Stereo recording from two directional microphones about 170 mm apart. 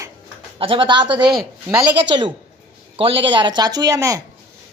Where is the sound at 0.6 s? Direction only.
30° right (ahead or behind).